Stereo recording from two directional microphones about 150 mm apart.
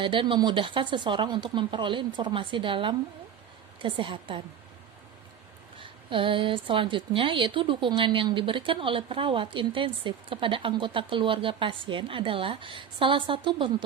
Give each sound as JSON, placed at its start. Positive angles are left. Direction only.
{"t": 0.0, "sound": "a woman's voice", "side_deg": -35}
{"t": 5.8, "sound": "a woman's voice", "side_deg": -35}